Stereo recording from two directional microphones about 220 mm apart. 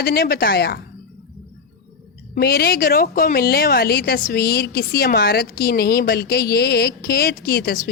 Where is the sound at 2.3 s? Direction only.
45° left (ahead or behind).